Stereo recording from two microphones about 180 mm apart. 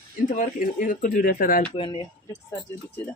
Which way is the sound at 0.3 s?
45° left (ahead or behind).